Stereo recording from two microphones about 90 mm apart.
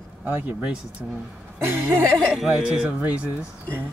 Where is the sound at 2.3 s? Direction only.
5° right (ahead or behind).